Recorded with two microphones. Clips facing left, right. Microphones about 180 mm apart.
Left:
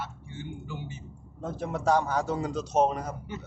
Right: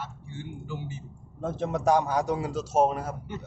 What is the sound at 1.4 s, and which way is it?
Speech, 25° right (ahead or behind).